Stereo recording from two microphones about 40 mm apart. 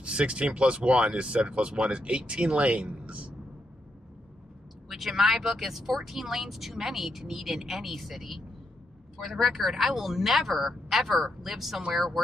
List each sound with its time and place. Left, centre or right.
0.0 s speech: right
2.8 s a sound: right
4.8 s speech: centre